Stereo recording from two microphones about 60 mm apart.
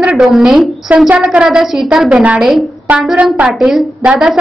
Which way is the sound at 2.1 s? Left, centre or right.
Right.